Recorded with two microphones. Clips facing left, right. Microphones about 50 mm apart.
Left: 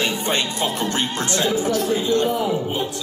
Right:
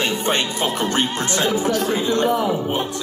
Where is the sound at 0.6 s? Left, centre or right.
Right.